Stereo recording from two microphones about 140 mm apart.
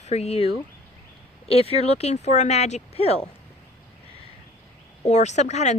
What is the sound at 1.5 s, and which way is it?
A woman's voice, 45° left (ahead or behind).